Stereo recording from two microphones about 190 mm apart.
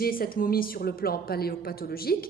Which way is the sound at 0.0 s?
50° left (ahead or behind).